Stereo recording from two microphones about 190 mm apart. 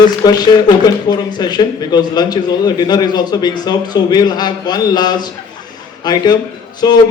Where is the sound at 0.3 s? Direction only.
20° left (ahead or behind).